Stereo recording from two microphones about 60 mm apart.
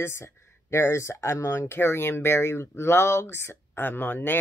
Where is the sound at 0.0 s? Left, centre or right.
Left.